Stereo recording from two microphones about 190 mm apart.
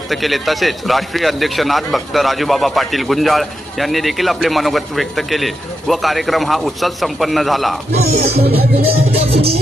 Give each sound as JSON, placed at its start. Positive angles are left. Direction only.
{"t": 0.1, "sound": "a man's voice", "side_deg": 0}
{"t": 7.9, "sound": "music", "side_deg": -35}